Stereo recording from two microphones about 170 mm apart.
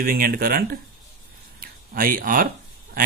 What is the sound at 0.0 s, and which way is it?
Speech, 55° right (ahead or behind).